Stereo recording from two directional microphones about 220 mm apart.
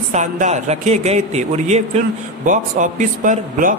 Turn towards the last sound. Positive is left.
turn(degrees=-35)  # may be behind; listen again after turning